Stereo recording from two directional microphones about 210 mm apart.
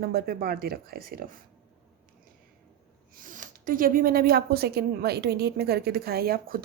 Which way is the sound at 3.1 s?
40° right (ahead or behind).